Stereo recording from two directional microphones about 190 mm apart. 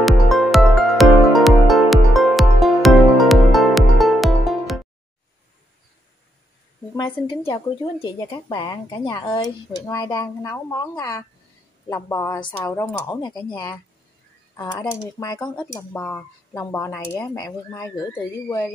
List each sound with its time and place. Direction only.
0.0 s music: centre (ahead or behind)
6.9 s speech: 20° left (ahead or behind)
15.7 s speech: 10° left (ahead or behind)